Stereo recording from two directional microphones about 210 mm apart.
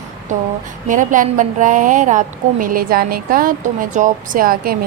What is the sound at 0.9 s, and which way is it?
A woman's voice, 40° right (ahead or behind).